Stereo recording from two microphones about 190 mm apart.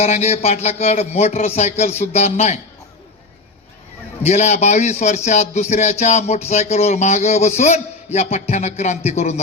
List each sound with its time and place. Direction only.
0.0 s a man's voice: 35° left (ahead or behind)
4.2 s a man's voice: 35° left (ahead or behind)